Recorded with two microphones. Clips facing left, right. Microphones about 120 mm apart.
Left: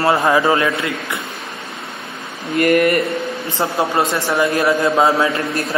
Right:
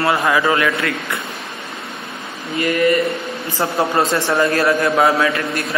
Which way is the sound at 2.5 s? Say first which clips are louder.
Left 2 dB; 55° left (ahead or behind).